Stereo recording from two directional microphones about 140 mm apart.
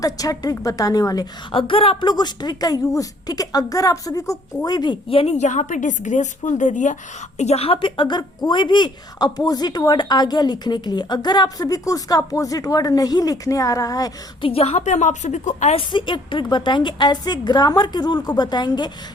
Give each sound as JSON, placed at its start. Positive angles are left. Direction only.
{"t": 0.0, "sound": "a woman's voice", "side_deg": 25}
{"t": 7.3, "sound": "a woman's voice", "side_deg": 50}
{"t": 14.4, "sound": "a woman's voice", "side_deg": 45}
{"t": 15.8, "sound": "a woman's voice", "side_deg": 35}